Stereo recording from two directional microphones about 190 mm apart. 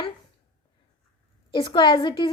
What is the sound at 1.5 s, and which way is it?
Speech, 25° left (ahead or behind).